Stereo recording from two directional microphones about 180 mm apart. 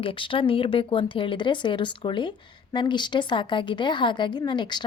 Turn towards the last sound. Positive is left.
turn(degrees=25)  # may be behind; listen again after turning